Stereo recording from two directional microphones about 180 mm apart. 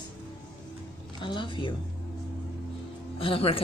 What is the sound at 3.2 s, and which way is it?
Speech, 30° left (ahead or behind).